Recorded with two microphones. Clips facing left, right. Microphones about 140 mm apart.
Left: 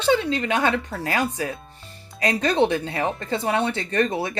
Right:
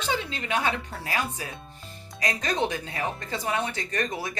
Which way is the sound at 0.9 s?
70° left (ahead or behind).